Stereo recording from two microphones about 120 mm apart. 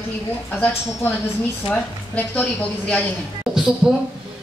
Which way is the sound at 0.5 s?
15° left (ahead or behind).